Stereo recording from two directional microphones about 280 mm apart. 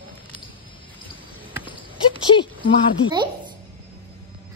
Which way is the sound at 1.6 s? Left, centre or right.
Centre.